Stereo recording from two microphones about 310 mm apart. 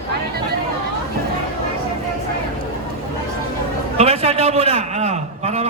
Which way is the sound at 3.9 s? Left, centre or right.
Centre.